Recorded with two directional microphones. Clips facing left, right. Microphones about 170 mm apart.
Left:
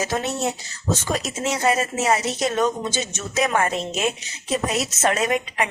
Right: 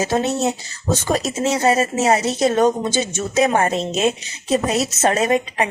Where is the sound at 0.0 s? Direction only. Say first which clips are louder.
Right 5 dB; 25° right (ahead or behind).